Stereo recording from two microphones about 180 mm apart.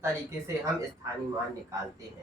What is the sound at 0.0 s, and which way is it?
Speech, 15° right (ahead or behind).